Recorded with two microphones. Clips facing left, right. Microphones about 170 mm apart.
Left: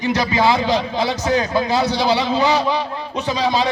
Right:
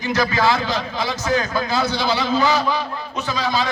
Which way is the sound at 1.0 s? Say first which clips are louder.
Left 3 dB; 35° left (ahead or behind).